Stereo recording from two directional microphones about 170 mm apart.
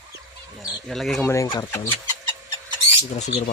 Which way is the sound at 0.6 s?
Centre (ahead or behind).